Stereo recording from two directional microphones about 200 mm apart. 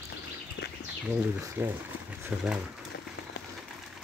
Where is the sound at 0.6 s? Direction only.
60° left (ahead or behind).